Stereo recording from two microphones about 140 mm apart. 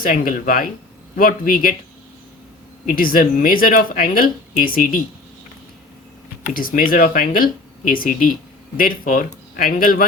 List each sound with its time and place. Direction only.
0.0 s speech: 75° left (ahead or behind)
2.8 s speech: 90° left
6.5 s speech: 90° left